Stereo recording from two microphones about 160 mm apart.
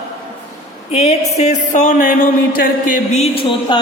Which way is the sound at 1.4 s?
45° left (ahead or behind).